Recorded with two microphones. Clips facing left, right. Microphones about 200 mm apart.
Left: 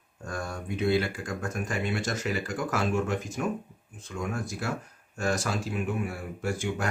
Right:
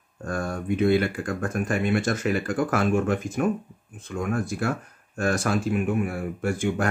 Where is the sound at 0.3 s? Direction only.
55° right (ahead or behind).